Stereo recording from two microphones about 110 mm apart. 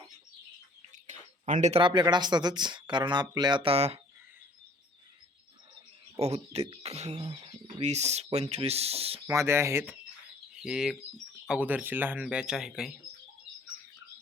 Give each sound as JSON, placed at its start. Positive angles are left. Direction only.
{"t": 1.8, "sound": "speech", "side_deg": -45}
{"t": 6.1, "sound": "speech", "side_deg": -75}
{"t": 7.2, "sound": "speech", "side_deg": -40}
{"t": 7.8, "sound": "speech", "side_deg": -90}
{"t": 9.2, "sound": "speech", "side_deg": -25}
{"t": 10.6, "sound": "speech", "side_deg": -5}